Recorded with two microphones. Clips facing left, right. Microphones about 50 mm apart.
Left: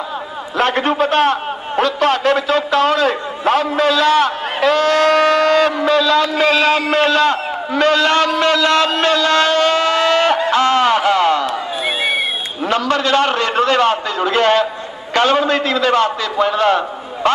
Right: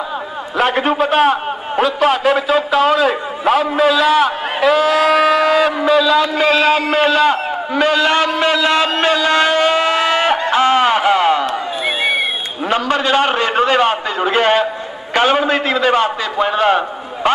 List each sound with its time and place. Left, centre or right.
0.6 s a man's voice: centre
10.5 s a sound: centre
12.6 s a man's voice: centre